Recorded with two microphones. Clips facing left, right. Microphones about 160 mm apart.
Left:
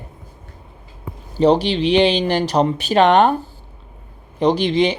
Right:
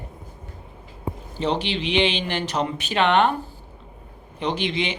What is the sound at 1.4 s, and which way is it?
Speech, 35° left (ahead or behind).